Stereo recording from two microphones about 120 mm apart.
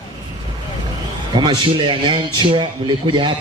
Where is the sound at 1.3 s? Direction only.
40° right (ahead or behind).